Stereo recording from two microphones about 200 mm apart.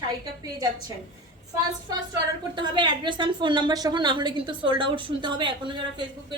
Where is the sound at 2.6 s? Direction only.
25° right (ahead or behind).